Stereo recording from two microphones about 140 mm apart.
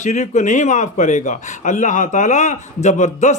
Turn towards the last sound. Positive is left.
turn(degrees=60)  # may be behind; listen again after turning